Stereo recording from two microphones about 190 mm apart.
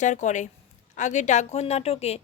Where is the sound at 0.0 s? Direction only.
40° left (ahead or behind).